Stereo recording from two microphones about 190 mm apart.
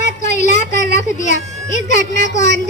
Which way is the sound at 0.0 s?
40° left (ahead or behind).